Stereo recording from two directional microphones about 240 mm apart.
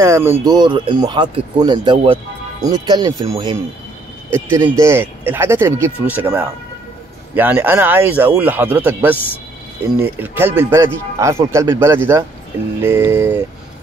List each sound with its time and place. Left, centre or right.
0.0 s speech: centre
10.2 s speech: centre